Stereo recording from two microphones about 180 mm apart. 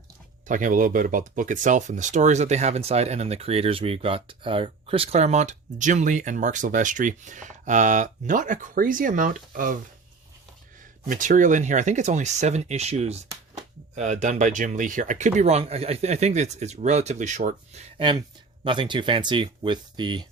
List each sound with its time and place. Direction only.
0.4 s speech: 45° right (ahead or behind)
11.1 s speech: 45° right (ahead or behind)
17.9 s speech: 30° right (ahead or behind)